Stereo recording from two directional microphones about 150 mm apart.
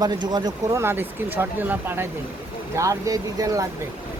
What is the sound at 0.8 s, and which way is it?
Speech, 15° right (ahead or behind).